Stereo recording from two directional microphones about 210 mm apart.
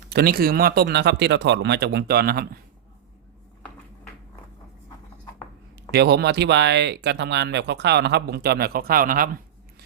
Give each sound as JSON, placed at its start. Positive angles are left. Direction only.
{"t": 0.1, "sound": "speech", "side_deg": -45}
{"t": 5.9, "sound": "speech", "side_deg": -50}